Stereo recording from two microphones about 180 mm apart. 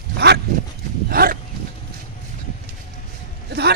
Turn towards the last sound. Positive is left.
turn(degrees=-65)  # may be behind; listen again after turning